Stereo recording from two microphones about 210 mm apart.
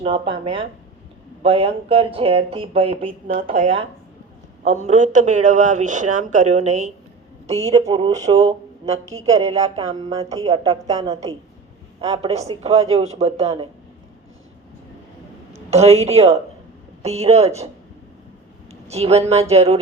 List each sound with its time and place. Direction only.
0.0 s speech: 25° right (ahead or behind)
7.9 s speech: 25° right (ahead or behind)
15.7 s speech: 30° right (ahead or behind)
18.7 s speech: 30° right (ahead or behind)